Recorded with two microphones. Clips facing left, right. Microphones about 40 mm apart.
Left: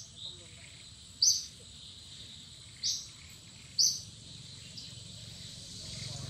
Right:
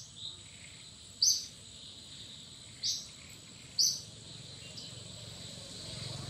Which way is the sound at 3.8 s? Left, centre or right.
Centre.